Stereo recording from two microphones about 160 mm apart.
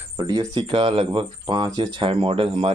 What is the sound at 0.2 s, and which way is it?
Speech, 25° right (ahead or behind).